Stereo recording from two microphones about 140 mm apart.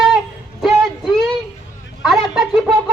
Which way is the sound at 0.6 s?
Centre (ahead or behind).